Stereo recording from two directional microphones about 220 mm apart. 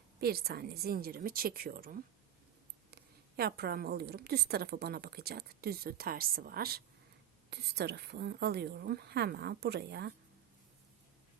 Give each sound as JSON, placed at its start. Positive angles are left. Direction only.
{"t": 0.2, "sound": "a woman's voice", "side_deg": -45}